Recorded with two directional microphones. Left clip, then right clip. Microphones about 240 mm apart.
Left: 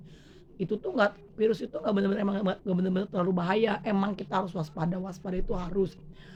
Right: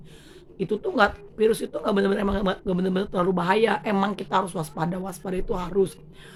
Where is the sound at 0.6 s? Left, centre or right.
Centre.